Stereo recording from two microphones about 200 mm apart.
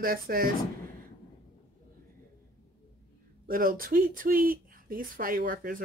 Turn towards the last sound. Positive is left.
turn(degrees=-45)  # may be behind; listen again after turning